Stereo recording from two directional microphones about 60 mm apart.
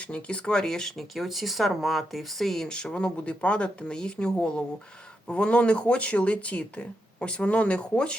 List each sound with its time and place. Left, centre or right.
0.0 s speech: centre